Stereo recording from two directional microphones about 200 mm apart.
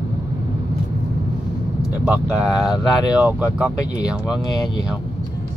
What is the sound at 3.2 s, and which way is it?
Speech, 5° right (ahead or behind).